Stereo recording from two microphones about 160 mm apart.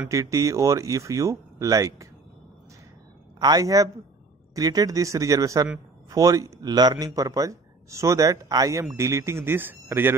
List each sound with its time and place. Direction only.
0.1 s speech: 20° right (ahead or behind)
3.3 s a man's voice: 25° right (ahead or behind)